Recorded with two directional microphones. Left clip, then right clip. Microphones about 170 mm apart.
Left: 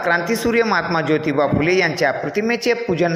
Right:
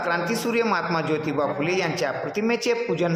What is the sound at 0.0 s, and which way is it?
A woman's voice, 15° left (ahead or behind).